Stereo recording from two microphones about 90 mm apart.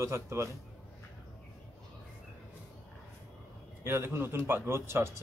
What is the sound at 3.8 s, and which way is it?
A man's voice, 25° right (ahead or behind).